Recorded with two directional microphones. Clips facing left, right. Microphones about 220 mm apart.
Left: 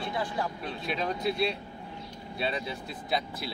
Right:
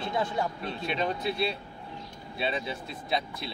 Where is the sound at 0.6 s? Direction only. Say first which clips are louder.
Right 2 dB; centre (ahead or behind).